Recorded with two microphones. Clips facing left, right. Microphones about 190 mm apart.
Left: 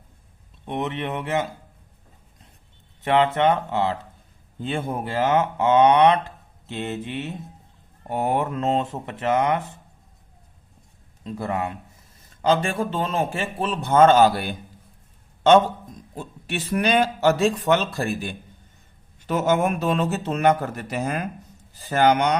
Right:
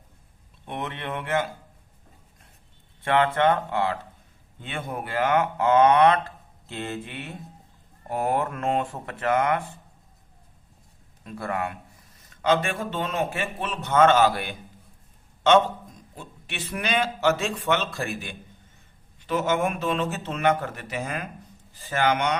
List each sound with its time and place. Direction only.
0.6 s speech: 20° left (ahead or behind)
3.0 s speech: 20° left (ahead or behind)
11.2 s speech: 20° left (ahead or behind)
12.4 s speech: 30° left (ahead or behind)
16.1 s speech: 40° left (ahead or behind)